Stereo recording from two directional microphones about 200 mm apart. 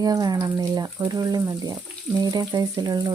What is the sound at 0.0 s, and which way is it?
Speech, 20° right (ahead or behind).